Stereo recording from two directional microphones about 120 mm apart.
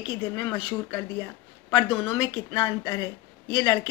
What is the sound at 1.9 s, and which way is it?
Speech, 40° left (ahead or behind).